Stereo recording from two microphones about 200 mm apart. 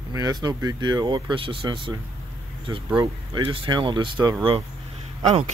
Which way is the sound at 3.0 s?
20° right (ahead or behind).